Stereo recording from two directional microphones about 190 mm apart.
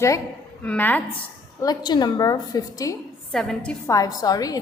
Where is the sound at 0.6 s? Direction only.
10° left (ahead or behind).